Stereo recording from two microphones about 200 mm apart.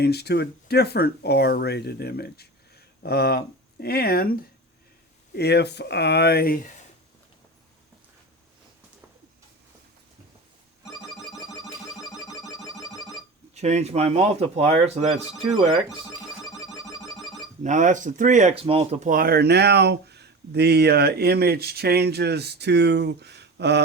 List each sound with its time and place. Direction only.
0.0 s speech: 55° left (ahead or behind)
11.1 s music: centre (ahead or behind)
13.5 s speech: 35° right (ahead or behind)
16.4 s music: centre (ahead or behind)
17.6 s speech: 40° right (ahead or behind); by 23.8 s 60° right (ahead or behind)